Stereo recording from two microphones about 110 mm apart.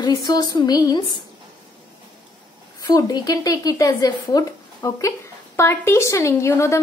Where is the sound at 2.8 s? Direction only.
35° left (ahead or behind).